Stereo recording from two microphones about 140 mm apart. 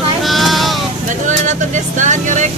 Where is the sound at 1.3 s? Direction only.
60° right (ahead or behind).